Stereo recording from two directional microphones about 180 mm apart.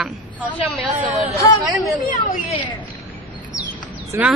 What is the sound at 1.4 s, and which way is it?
Speech, 15° left (ahead or behind).